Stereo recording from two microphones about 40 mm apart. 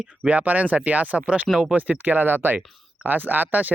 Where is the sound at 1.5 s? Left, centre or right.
Centre.